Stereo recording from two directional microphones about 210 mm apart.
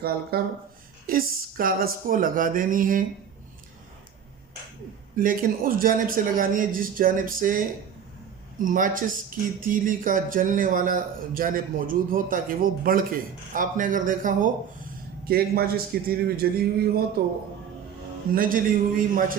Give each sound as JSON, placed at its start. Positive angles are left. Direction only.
{"t": 0.0, "sound": "a man's voice", "side_deg": -45}
{"t": 5.2, "sound": "a man's voice", "side_deg": -40}
{"t": 18.3, "sound": "a man's voice", "side_deg": -40}